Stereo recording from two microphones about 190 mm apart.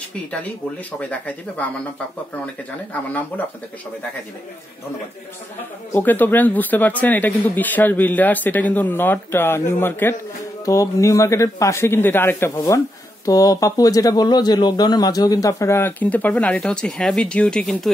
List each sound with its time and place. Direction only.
0.9 s speech: 5° left (ahead or behind)
5.9 s speech: 10° left (ahead or behind)